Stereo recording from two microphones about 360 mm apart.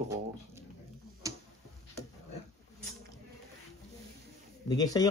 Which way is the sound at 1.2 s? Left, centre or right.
Centre.